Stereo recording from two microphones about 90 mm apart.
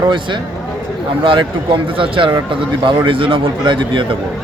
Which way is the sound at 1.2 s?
70° right (ahead or behind).